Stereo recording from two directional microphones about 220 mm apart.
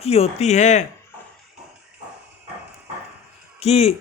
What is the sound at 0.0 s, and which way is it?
Speech, 25° left (ahead or behind).